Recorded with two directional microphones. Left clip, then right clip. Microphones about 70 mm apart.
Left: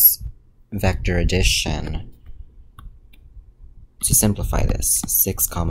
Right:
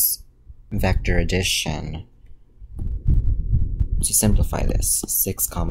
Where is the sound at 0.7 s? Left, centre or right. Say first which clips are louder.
Left 1 dB; centre.